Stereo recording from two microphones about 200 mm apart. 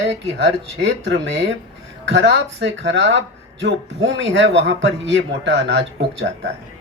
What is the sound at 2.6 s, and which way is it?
A man's voice, 65° right (ahead or behind).